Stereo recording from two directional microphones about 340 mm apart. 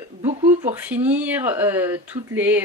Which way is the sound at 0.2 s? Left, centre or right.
Centre.